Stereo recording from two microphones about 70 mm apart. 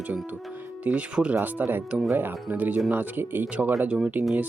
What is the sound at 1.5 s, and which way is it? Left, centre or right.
Speech, right.